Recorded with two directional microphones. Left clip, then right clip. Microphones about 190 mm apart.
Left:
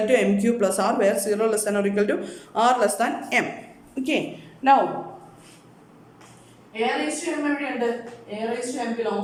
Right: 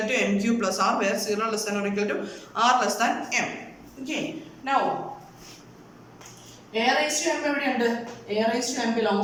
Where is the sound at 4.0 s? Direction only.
65° left (ahead or behind).